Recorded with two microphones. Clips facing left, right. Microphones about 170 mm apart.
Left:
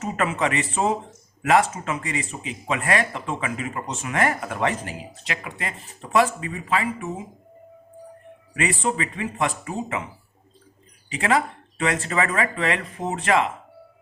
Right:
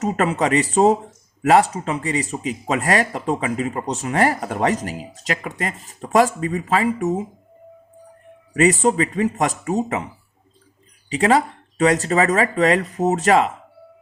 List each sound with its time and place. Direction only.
0.0 s speech: 40° right (ahead or behind)
8.5 s speech: 40° right (ahead or behind)
11.1 s speech: 35° right (ahead or behind)